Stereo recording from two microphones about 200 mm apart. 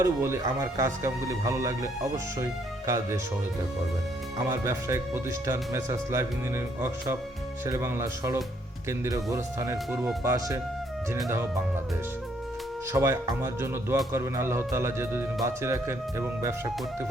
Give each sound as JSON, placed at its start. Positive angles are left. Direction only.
{"t": 0.0, "sound": "speech", "side_deg": -15}
{"t": 4.4, "sound": "speech", "side_deg": -15}
{"t": 7.6, "sound": "speech", "side_deg": -15}
{"t": 12.9, "sound": "speech", "side_deg": -15}